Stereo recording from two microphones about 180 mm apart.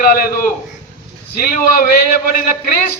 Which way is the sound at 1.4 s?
55° left (ahead or behind).